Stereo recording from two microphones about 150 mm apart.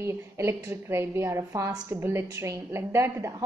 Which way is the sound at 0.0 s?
15° right (ahead or behind).